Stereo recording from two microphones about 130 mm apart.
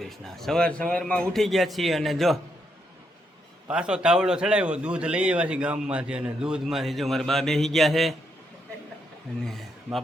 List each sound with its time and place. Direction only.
0.0 s a man's voice: 5° left (ahead or behind)
3.7 s a man's voice: 5° right (ahead or behind)
9.3 s a man's voice: 5° left (ahead or behind)